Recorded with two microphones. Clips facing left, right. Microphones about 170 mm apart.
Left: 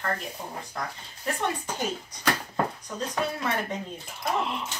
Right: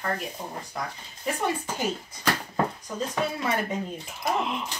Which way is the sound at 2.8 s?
Centre (ahead or behind).